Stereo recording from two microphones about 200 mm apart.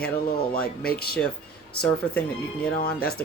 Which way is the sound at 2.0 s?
5° left (ahead or behind).